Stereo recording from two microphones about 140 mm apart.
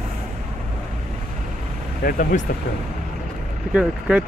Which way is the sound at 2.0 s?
85° left.